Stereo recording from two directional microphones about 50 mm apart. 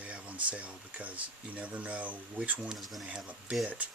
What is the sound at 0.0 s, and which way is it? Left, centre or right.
Speech, right.